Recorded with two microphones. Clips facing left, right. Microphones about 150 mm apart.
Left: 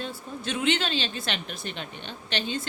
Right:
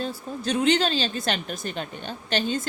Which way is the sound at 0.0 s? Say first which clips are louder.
Right 5 dB; 40° right (ahead or behind).